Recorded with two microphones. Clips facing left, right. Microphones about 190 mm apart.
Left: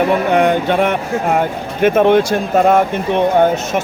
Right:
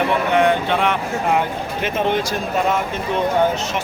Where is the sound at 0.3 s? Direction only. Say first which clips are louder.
Left 2 dB; 50° left (ahead or behind).